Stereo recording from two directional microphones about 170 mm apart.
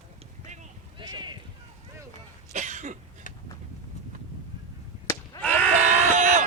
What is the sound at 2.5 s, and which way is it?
Cough, 45° right (ahead or behind).